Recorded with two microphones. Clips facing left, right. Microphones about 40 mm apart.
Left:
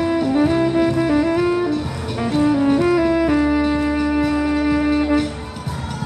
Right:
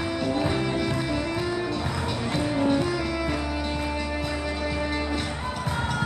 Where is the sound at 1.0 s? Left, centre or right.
Left.